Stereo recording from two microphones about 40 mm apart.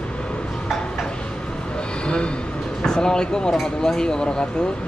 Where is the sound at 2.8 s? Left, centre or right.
Centre.